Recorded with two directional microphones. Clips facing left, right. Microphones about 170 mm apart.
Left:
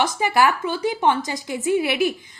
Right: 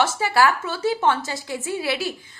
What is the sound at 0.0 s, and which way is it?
A woman's voice, 15° left (ahead or behind).